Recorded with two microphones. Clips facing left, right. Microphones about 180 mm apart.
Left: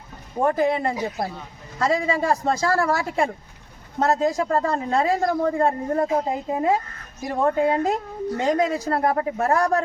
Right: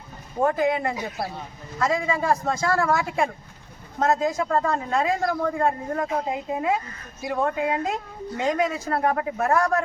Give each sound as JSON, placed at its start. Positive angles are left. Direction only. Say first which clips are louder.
{"t": 0.4, "sound": "a woman's voice", "louder": "left 1 dB", "side_deg": 30}